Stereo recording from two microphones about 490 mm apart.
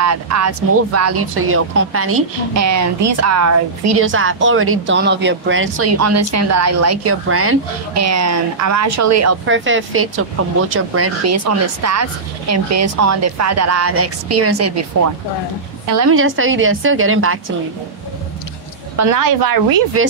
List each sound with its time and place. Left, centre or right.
0.0 s speech: right
15.9 s speech: right
18.9 s speech: right
20.0 s speech: right